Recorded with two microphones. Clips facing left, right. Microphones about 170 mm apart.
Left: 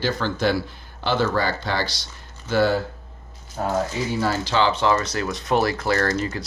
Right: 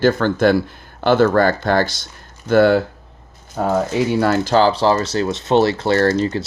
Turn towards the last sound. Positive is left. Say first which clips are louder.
# right 7 dB
turn(degrees=-30)  # may be behind; listen again after turning